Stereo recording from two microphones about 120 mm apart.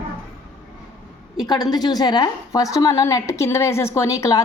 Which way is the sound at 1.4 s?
35° left (ahead or behind).